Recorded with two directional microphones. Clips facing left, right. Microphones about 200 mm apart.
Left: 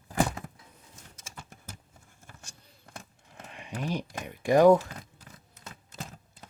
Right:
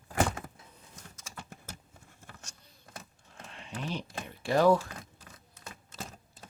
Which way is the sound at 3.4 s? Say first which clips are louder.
Left 4 dB; 15° left (ahead or behind).